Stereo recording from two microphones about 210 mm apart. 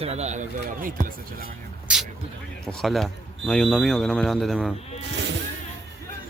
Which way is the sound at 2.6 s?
Centre (ahead or behind).